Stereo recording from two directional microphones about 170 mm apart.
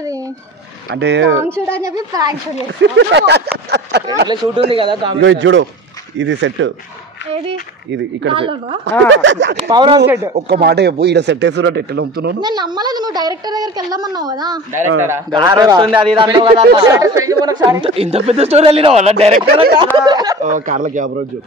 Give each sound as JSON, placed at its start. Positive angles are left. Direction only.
{"t": 0.9, "sound": "speech", "side_deg": -90}
{"t": 1.8, "sound": "a woman's voice", "side_deg": -20}
{"t": 2.8, "sound": "speech", "side_deg": -90}
{"t": 4.3, "sound": "a woman's voice", "side_deg": -30}
{"t": 5.2, "sound": "speech", "side_deg": -90}
{"t": 7.9, "sound": "speech", "side_deg": -90}
{"t": 9.7, "sound": "a woman's voice", "side_deg": -25}
{"t": 10.5, "sound": "speech", "side_deg": -75}
{"t": 12.4, "sound": "a woman's voice", "side_deg": -25}
{"t": 20.0, "sound": "a woman's voice", "side_deg": -25}
{"t": 20.4, "sound": "a man's voice", "side_deg": -50}